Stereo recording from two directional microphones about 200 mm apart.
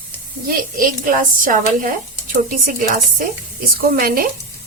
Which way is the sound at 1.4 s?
40° right (ahead or behind).